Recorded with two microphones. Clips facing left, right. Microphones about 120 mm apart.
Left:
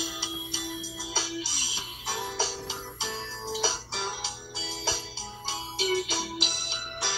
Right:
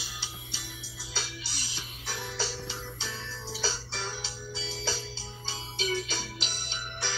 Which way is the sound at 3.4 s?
15° left (ahead or behind).